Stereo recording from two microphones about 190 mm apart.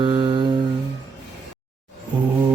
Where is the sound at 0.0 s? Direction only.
25° right (ahead or behind).